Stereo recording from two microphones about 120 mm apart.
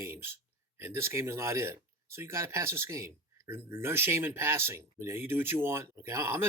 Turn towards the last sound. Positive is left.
turn(degrees=-20)  # may be behind; listen again after turning